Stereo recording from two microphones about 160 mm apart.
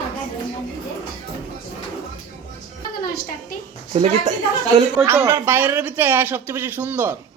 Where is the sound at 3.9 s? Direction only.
45° right (ahead or behind).